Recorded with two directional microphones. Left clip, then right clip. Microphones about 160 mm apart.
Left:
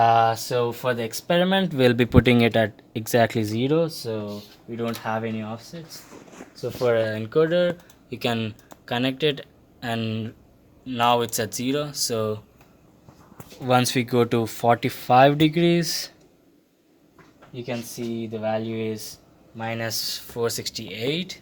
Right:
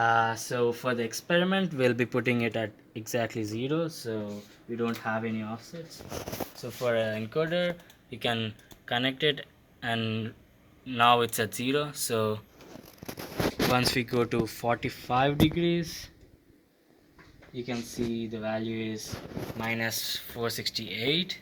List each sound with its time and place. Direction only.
0.0 s speech: 80° left
6.8 s speech: 90° left; by 12.4 s 20° left (ahead or behind)
13.7 s speech: 45° left (ahead or behind); by 16.1 s 90° left
17.7 s speech: 65° left (ahead or behind)
19.5 s speech: 80° left; by 21.3 s 20° left (ahead or behind)